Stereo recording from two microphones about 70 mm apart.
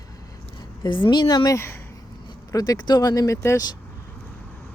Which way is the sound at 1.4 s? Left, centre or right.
Left.